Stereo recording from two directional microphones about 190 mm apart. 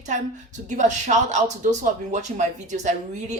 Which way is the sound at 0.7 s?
40° right (ahead or behind).